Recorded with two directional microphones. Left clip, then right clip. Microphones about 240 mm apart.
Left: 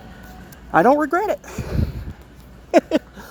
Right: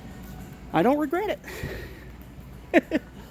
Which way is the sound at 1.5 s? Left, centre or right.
Centre.